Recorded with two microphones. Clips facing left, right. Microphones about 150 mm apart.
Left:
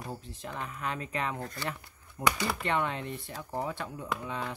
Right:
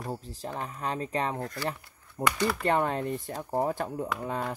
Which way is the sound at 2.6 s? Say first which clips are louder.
Right 5 dB; 40° right (ahead or behind).